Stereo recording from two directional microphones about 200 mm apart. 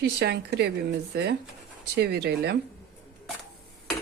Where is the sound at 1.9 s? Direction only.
55° right (ahead or behind).